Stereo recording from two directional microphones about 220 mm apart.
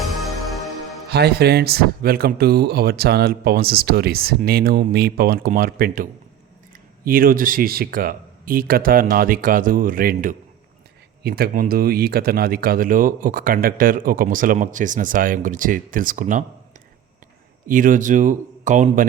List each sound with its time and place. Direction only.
1.1 s speech: 45° right (ahead or behind)
17.7 s speech: 40° right (ahead or behind)